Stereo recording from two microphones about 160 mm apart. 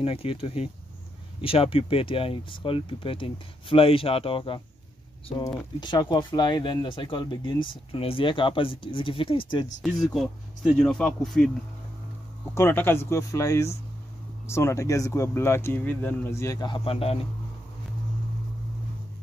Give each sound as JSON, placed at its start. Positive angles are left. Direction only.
{"t": 0.0, "sound": "speech", "side_deg": 35}
{"t": 9.8, "sound": "speech", "side_deg": 0}
{"t": 12.5, "sound": "speech", "side_deg": 15}